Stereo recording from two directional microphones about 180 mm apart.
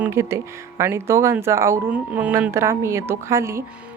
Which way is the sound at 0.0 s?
15° right (ahead or behind).